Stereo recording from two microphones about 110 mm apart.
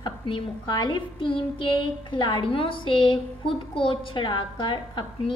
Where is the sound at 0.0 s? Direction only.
45° left (ahead or behind).